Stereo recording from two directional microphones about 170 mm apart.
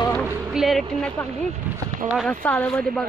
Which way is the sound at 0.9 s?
5° left (ahead or behind).